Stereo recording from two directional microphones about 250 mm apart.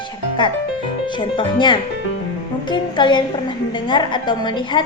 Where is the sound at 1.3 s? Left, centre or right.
Centre.